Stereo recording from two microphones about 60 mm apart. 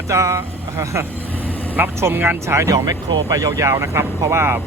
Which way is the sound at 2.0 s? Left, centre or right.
Right.